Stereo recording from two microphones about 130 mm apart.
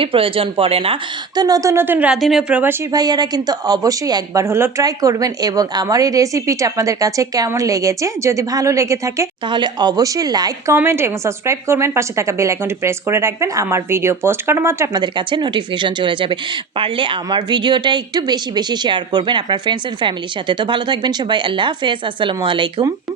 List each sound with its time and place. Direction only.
0.0 s speech: 45° right (ahead or behind)
1.4 s speech: 30° right (ahead or behind); by 2.1 s 10° right (ahead or behind)
2.2 s speech: centre (ahead or behind)
2.9 s speech: 30° right (ahead or behind)
9.5 s speech: 35° right (ahead or behind)
10.8 s speech: 20° right (ahead or behind)
14.9 s speech: 35° right (ahead or behind)